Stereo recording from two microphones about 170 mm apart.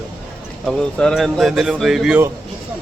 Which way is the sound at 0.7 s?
Centre (ahead or behind).